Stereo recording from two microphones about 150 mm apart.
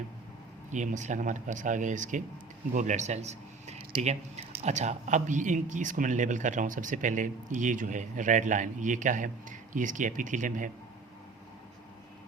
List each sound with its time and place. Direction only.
0.7 s speech: 55° right (ahead or behind)